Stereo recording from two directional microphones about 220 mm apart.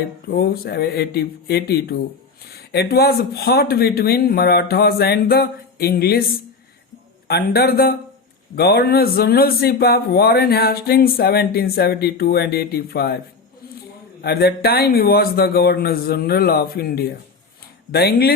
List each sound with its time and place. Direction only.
0.3 s a man's voice: 45° left (ahead or behind)
7.3 s a man's voice: 45° left (ahead or behind)
14.2 s a man's voice: 45° left (ahead or behind)